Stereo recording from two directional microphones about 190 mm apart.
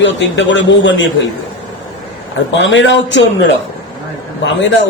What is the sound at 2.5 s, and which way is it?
Speech, 75° left (ahead or behind).